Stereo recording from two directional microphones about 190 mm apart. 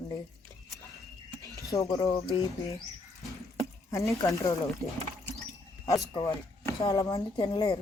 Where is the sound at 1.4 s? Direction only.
15° left (ahead or behind).